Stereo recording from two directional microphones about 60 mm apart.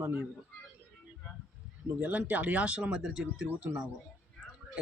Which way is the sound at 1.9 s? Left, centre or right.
Right.